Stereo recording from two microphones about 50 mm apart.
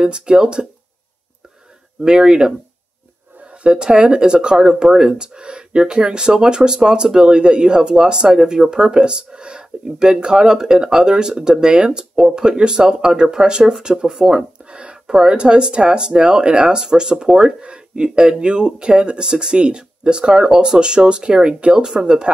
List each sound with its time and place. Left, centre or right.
0.0 s speech: centre
2.0 s speech: centre
3.6 s speech: centre